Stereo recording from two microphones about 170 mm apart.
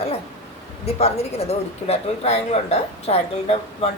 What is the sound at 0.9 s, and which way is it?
Speech, 40° left (ahead or behind).